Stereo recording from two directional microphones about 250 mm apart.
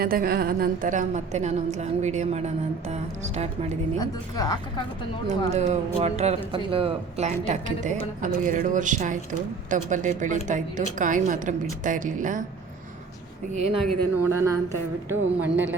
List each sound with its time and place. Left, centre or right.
0.0 s speech: right
3.9 s a woman's voice: centre
5.5 s a woman's voice: right
13.5 s speech: right
14.3 s a woman's voice: centre